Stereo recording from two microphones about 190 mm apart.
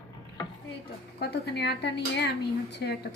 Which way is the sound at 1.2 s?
60° left (ahead or behind).